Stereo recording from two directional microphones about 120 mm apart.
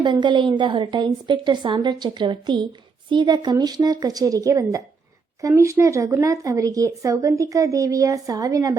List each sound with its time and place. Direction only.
0.0 s a woman's voice: 40° right (ahead or behind)